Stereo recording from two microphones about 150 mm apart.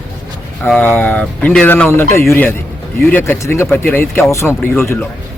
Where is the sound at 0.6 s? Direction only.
10° left (ahead or behind).